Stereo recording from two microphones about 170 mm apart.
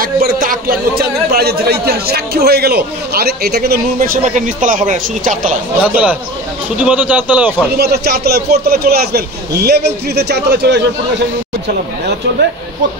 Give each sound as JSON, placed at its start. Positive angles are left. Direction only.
{"t": 0.0, "sound": "speech", "side_deg": -55}
{"t": 5.9, "sound": "a man's voice", "side_deg": -10}
{"t": 7.7, "sound": "a man's voice", "side_deg": -70}